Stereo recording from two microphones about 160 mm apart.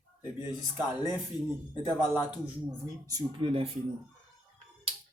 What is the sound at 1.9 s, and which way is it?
Speech, 10° right (ahead or behind).